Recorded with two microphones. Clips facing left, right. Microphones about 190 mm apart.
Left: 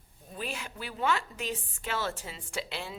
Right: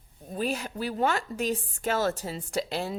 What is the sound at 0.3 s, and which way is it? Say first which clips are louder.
A woman's voice: right 8 dB; 40° right (ahead or behind).